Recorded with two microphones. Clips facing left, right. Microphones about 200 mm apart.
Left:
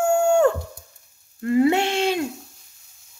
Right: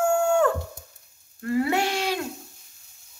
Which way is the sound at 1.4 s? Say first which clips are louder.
Left 5 dB; 20° left (ahead or behind).